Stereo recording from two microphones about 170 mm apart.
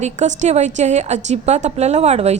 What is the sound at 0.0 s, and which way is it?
A woman's voice, 45° right (ahead or behind).